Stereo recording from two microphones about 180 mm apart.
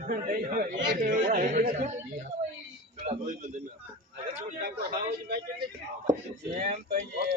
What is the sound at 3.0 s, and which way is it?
Speech, 40° right (ahead or behind).